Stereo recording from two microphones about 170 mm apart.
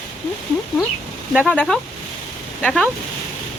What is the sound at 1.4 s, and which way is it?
Speech, 5° left (ahead or behind).